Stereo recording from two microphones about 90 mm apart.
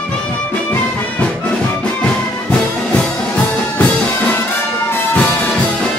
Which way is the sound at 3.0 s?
15° left (ahead or behind).